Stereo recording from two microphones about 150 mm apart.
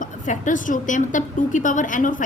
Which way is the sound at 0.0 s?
60° left (ahead or behind).